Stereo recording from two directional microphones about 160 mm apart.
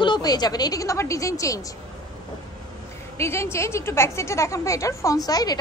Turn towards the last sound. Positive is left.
turn(degrees=25)  # may be behind; listen again after turning